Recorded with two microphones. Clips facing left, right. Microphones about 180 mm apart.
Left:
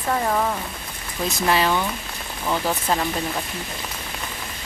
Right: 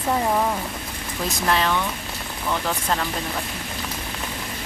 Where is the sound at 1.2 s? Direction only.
5° left (ahead or behind).